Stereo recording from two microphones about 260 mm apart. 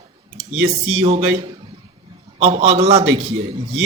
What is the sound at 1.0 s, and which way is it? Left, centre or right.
Speech, right.